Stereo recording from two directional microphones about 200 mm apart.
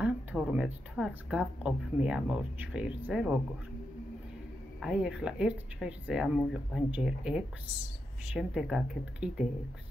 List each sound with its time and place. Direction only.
0.0 s speech: 5° right (ahead or behind)
4.7 s speech: 5° right (ahead or behind)